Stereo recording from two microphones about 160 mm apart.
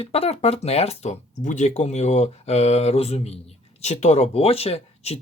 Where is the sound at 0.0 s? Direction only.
40° left (ahead or behind).